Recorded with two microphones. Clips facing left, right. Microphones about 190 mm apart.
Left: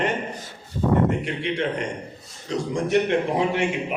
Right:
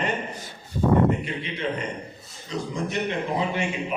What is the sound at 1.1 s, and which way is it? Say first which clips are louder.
A man's voice: left 2 dB; 75° left (ahead or behind).